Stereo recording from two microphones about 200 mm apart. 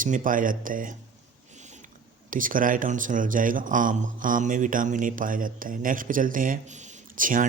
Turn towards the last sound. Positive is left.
turn(degrees=-40)  # may be behind; listen again after turning